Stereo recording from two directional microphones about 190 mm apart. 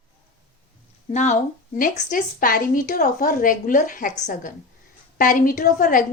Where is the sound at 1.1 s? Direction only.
40° left (ahead or behind).